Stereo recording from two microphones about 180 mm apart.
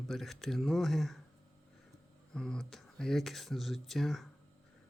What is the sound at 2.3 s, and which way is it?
Speech, 5° left (ahead or behind).